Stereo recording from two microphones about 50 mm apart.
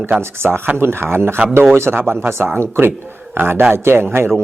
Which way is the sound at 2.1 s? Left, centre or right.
Right.